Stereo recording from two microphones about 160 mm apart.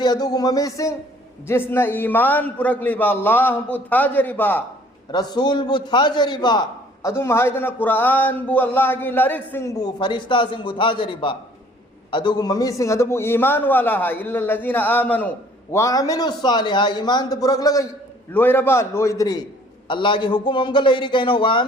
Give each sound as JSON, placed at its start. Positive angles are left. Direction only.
{"t": 0.0, "sound": "a man's voice", "side_deg": 25}
{"t": 5.1, "sound": "a man's voice", "side_deg": 25}
{"t": 7.1, "sound": "speech", "side_deg": 15}
{"t": 15.7, "sound": "a man's voice", "side_deg": 20}